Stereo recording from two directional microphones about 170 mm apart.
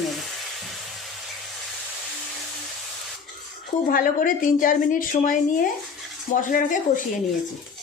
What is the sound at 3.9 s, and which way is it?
A woman's voice, 55° left (ahead or behind).